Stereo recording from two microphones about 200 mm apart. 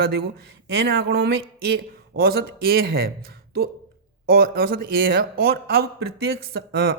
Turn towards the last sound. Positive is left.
turn(degrees=-50)  # may be behind; listen again after turning